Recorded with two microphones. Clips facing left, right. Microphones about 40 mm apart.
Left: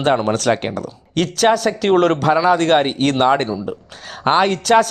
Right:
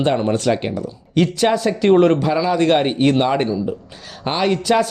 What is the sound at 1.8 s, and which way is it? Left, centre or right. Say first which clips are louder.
Speech: right 1 dB; left.